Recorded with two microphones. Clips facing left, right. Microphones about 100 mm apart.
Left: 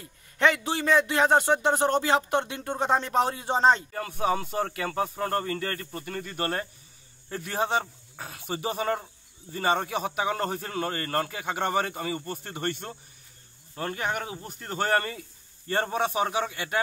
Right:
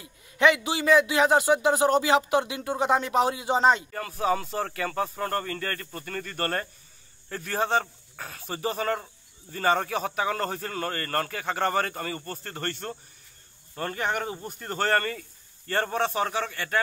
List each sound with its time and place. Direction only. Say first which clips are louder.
0.4 s a man's voice: right 2 dB; 5° right (ahead or behind)
4.2 s a man's voice: even; 10° left (ahead or behind)
14.8 s a man's voice: right 1 dB; 15° left (ahead or behind)